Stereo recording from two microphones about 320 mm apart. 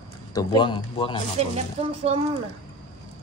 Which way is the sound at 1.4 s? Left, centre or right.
Centre.